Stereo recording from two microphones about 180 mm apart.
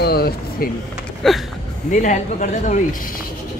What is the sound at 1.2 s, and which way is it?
Speech, centre (ahead or behind).